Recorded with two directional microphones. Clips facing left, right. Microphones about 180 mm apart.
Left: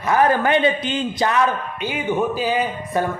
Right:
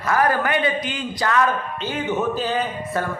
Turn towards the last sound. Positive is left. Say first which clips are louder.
# left 2 dB
turn(degrees=10)  # may be behind; listen again after turning